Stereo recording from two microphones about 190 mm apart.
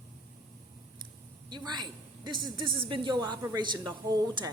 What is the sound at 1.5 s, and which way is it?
A woman's voice, 25° right (ahead or behind).